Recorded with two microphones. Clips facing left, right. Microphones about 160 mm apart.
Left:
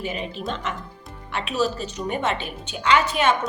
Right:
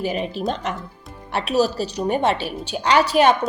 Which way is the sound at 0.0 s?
40° right (ahead or behind).